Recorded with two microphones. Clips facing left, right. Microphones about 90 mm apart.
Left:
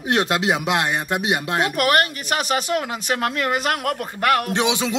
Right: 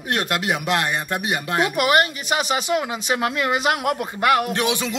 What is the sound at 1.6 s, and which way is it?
Speech, 10° right (ahead or behind).